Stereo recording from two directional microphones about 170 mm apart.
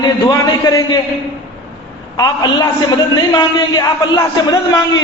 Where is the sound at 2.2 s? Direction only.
25° left (ahead or behind).